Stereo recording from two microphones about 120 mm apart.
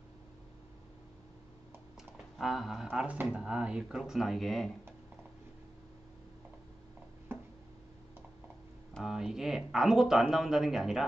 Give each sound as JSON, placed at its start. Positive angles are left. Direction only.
{"t": 2.3, "sound": "speech", "side_deg": 0}
{"t": 7.3, "sound": "a sound", "side_deg": -20}
{"t": 8.9, "sound": "speech", "side_deg": -5}